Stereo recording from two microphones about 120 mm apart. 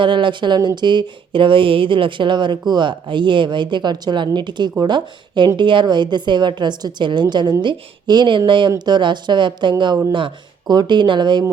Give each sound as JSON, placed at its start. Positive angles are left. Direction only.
{"t": 0.0, "sound": "speech", "side_deg": -40}